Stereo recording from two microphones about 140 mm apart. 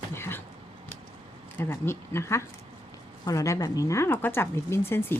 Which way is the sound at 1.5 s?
15° left (ahead or behind).